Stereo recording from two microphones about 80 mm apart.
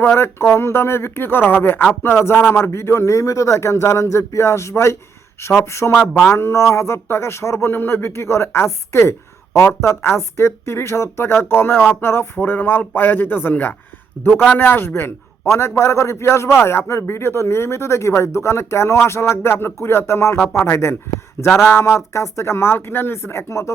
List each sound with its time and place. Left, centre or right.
0.0 s a man's voice: left